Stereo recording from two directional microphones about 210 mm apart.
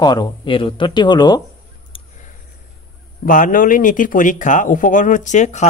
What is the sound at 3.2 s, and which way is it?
Speech, 40° left (ahead or behind).